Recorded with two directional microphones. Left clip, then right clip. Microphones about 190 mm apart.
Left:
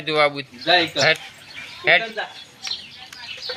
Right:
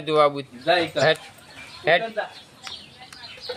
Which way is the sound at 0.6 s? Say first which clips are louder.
Left 2 dB; 30° right (ahead or behind).